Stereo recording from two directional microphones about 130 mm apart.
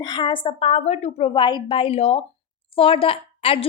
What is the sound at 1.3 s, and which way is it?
A woman's voice, 35° left (ahead or behind).